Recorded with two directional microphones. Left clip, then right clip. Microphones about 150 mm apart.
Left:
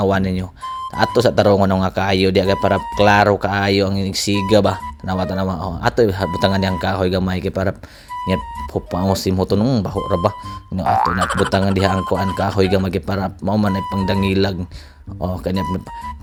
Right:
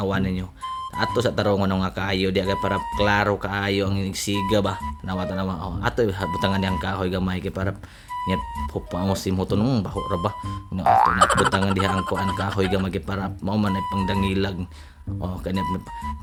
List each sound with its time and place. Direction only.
0.0 s speech: 40° left (ahead or behind)
9.6 s speech: 20° left (ahead or behind)
10.8 s frog: centre (ahead or behind)
11.5 s speech: 30° left (ahead or behind)
11.9 s frog: centre (ahead or behind)
12.4 s speech: 30° left (ahead or behind)